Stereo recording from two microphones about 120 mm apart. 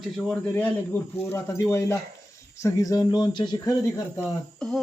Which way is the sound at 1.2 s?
20° left (ahead or behind).